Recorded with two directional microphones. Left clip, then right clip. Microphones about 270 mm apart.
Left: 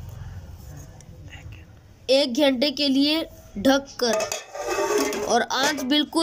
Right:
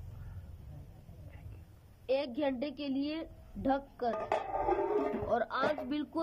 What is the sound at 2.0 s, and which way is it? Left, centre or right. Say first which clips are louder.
Speech: left 13 dB; centre.